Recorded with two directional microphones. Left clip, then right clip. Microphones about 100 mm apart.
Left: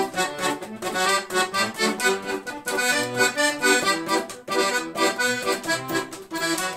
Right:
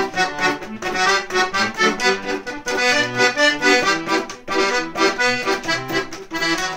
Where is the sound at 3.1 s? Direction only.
25° left (ahead or behind).